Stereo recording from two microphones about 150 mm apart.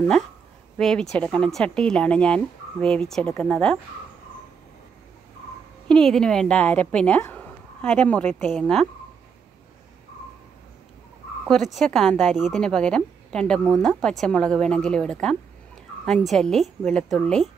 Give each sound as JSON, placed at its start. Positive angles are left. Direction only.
{"t": 0.7, "sound": "speech", "side_deg": 5}
{"t": 5.9, "sound": "a woman's voice", "side_deg": 5}
{"t": 11.4, "sound": "speech", "side_deg": 0}